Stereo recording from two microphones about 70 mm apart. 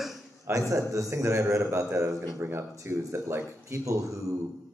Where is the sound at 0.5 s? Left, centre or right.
Right.